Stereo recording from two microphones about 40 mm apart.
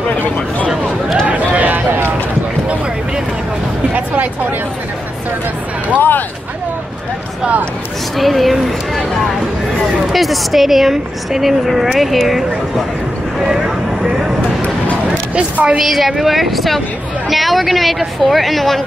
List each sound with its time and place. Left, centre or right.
1.5 s a sound: right
1.9 s a sound: right
3.9 s music: right
5.9 s speech: left
8.2 s a woman's voice: centre
10.1 s a woman's voice: centre
15.8 s a woman's voice: centre